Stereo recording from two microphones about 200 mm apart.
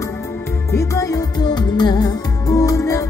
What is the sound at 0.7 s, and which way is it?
Music, 15° left (ahead or behind).